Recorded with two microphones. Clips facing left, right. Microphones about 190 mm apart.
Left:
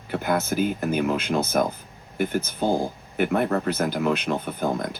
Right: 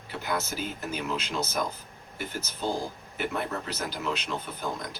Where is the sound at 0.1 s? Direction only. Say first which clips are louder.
Left 8 dB; 55° left (ahead or behind).